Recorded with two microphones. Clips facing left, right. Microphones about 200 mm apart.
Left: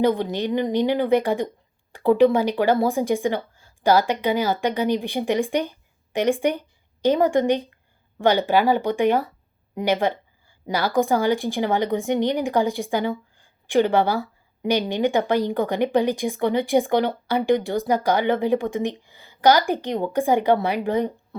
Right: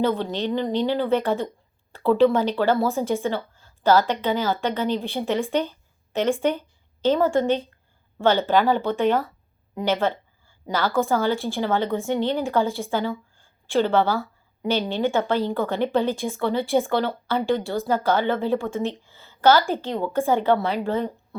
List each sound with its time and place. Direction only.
0.0 s a woman's voice: 15° left (ahead or behind)